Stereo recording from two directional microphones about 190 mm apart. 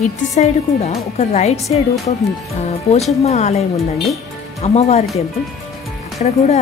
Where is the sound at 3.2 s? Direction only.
35° left (ahead or behind).